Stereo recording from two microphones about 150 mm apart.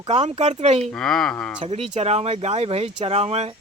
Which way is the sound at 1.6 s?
40° right (ahead or behind).